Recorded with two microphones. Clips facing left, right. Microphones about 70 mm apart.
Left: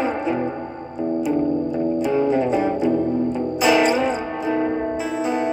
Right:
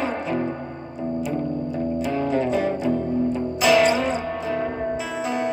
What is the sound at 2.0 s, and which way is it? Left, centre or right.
Music, centre.